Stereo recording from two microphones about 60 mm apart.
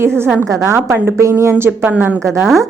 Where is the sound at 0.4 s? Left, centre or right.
Right.